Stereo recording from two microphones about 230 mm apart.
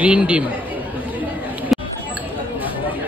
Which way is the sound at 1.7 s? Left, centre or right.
Centre.